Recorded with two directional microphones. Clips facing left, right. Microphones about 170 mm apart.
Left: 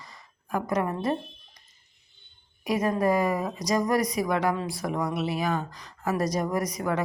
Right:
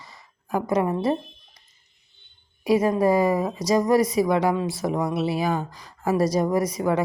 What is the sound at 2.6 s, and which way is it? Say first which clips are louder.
A woman's voice: right 5 dB; 25° right (ahead or behind).